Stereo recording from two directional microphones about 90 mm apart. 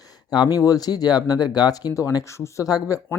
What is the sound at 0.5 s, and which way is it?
Speech, 45° left (ahead or behind).